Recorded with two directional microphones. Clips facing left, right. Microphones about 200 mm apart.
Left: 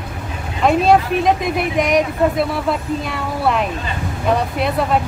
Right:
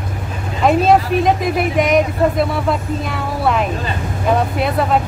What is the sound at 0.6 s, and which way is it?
Speech, centre (ahead or behind).